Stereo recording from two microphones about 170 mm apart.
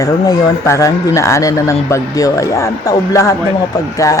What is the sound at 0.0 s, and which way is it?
Speech, 20° left (ahead or behind).